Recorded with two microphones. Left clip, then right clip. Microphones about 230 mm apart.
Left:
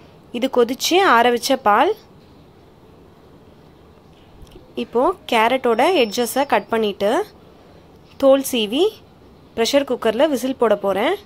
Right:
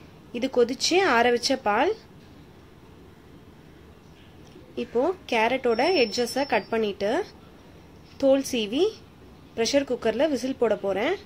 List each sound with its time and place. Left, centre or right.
0.3 s a woman's voice: centre
4.7 s a woman's voice: centre